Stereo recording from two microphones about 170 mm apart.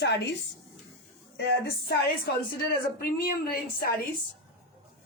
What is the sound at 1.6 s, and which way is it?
A woman's voice, 70° left (ahead or behind).